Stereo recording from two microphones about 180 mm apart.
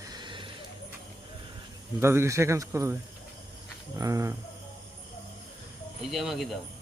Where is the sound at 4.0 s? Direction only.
20° right (ahead or behind).